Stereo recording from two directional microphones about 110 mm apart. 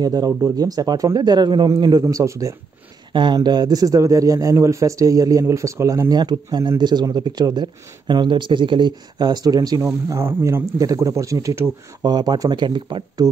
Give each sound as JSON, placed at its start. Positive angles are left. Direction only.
{"t": 0.0, "sound": "speech", "side_deg": -35}
{"t": 3.1, "sound": "speech", "side_deg": -45}
{"t": 13.2, "sound": "speech", "side_deg": -35}